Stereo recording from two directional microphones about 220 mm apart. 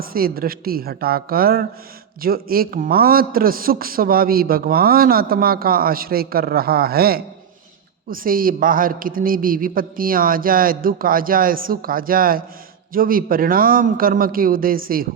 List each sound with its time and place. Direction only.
0.0 s a man's voice: 40° right (ahead or behind)